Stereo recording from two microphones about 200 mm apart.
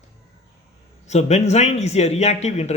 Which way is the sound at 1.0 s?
35° left (ahead or behind).